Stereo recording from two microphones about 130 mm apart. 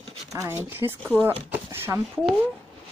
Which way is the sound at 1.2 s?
35° right (ahead or behind).